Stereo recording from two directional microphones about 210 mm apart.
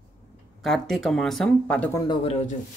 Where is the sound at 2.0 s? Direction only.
25° left (ahead or behind).